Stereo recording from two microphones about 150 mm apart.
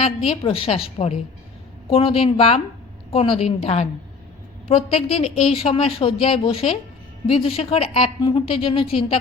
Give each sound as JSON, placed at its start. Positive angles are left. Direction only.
{"t": 0.3, "sound": "a woman's voice", "side_deg": 35}